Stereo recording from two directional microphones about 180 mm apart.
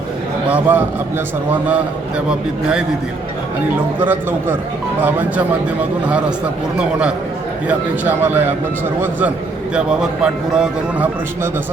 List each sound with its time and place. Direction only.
0.4 s a man's voice: 10° right (ahead or behind)
4.0 s a man's voice: 10° right (ahead or behind)
7.7 s a man's voice: 10° right (ahead or behind)
9.7 s speech: 5° right (ahead or behind)